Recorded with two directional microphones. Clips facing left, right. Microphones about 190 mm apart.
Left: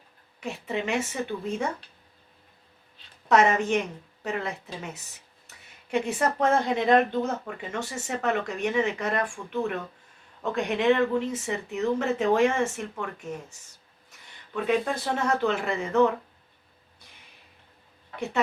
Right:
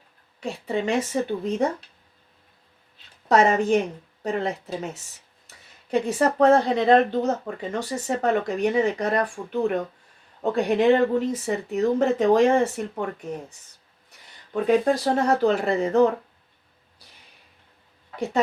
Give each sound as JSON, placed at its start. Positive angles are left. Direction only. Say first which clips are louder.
{"t": 0.3, "sound": "speech", "louder": "right 4 dB", "side_deg": -35}
{"t": 3.2, "sound": "speech", "louder": "right 3 dB", "side_deg": -35}
{"t": 5.9, "sound": "speech", "louder": "right 4 dB", "side_deg": -35}
{"t": 14.5, "sound": "speech", "louder": "right 6 dB", "side_deg": -35}